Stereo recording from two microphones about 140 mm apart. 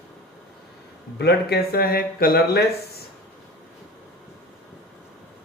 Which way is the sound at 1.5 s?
90° left.